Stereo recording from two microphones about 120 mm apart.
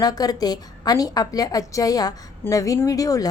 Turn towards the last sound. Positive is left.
turn(degrees=30)  # may be behind; listen again after turning